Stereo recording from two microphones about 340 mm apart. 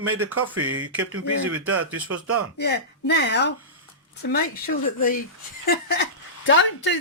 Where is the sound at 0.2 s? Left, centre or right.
Right.